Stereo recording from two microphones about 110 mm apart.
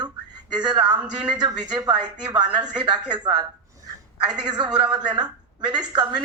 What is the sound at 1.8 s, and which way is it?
Speech, 40° right (ahead or behind).